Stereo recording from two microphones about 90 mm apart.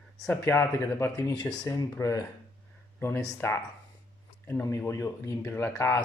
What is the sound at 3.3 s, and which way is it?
Speech, 30° left (ahead or behind).